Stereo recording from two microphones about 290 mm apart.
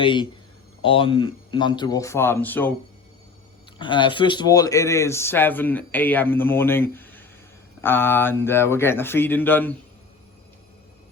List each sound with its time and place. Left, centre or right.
0.0 s speech: centre
3.8 s speech: centre